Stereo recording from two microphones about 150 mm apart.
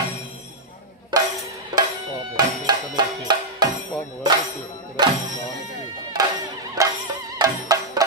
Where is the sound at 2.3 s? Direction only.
30° right (ahead or behind).